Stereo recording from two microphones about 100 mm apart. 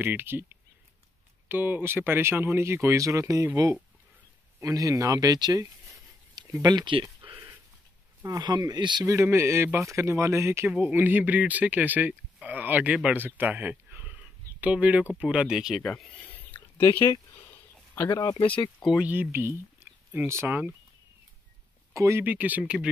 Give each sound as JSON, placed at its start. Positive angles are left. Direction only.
{"t": 0.0, "sound": "speech", "side_deg": -20}
{"t": 4.6, "sound": "speech", "side_deg": -35}
{"t": 8.2, "sound": "speech", "side_deg": -40}
{"t": 9.0, "sound": "speech", "side_deg": -30}
{"t": 16.1, "sound": "a sound", "side_deg": 15}
{"t": 18.1, "sound": "speech", "side_deg": 45}
{"t": 18.4, "sound": "speech", "side_deg": 60}
{"t": 19.0, "sound": "speech", "side_deg": -20}
{"t": 21.9, "sound": "speech", "side_deg": -30}
{"t": 22.2, "sound": "speech", "side_deg": -15}